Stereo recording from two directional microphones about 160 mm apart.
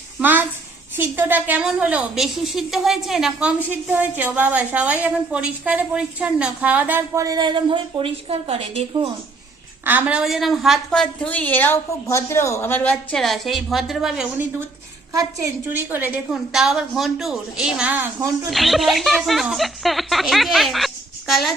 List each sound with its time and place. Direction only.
0.2 s a sound: 10° right (ahead or behind)
0.9 s a woman's voice: 10° right (ahead or behind)
7.3 s a woman's voice: 25° right (ahead or behind)
9.8 s a woman's voice: 10° right (ahead or behind)
15.7 s a woman's voice: 10° right (ahead or behind)
18.5 s a woman's voice: centre (ahead or behind)